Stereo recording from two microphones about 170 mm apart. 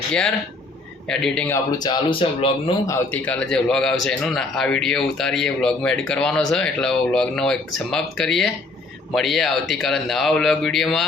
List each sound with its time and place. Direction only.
0.1 s speech: 5° left (ahead or behind)
1.8 s speech: 30° left (ahead or behind)
2.8 s speech: 15° left (ahead or behind)